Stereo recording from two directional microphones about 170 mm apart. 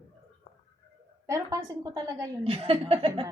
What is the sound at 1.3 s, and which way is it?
A woman's voice, 20° right (ahead or behind).